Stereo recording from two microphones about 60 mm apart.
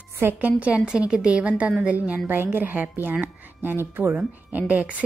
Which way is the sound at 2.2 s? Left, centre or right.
Right.